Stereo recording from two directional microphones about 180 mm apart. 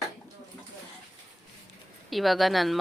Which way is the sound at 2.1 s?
Centre (ahead or behind).